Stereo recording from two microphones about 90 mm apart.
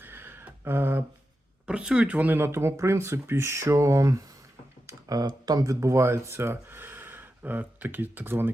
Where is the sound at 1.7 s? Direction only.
10° right (ahead or behind).